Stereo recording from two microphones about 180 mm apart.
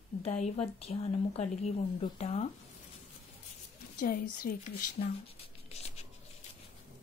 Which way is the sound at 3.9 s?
50° left (ahead or behind).